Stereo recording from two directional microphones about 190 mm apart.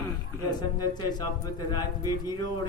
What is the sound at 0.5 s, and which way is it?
A man's voice, 20° left (ahead or behind).